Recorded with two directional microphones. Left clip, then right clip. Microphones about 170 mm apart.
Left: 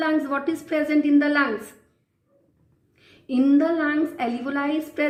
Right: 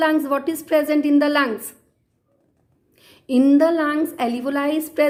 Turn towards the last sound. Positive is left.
turn(degrees=-40)  # may be behind; listen again after turning